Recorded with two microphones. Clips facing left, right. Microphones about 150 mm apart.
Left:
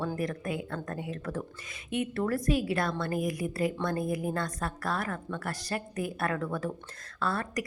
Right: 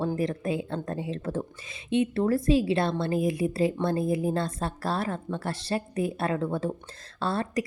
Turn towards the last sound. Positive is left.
turn(degrees=-25)  # may be behind; listen again after turning